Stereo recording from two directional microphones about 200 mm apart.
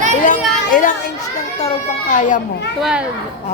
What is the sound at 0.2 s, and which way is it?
A child's voice, 40° left (ahead or behind).